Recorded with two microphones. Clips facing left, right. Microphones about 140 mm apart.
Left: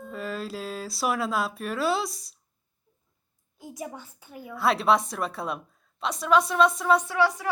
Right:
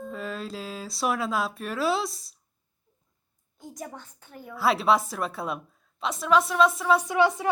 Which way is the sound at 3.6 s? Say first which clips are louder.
Left 2 dB; 5° left (ahead or behind).